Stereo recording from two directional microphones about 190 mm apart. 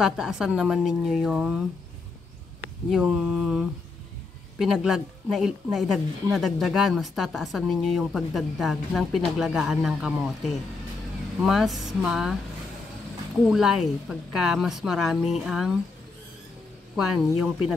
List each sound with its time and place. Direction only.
0.0 s a woman's voice: 5° right (ahead or behind)
2.9 s a woman's voice: 5° right (ahead or behind)
13.4 s a woman's voice: 5° right (ahead or behind)
16.9 s a woman's voice: centre (ahead or behind)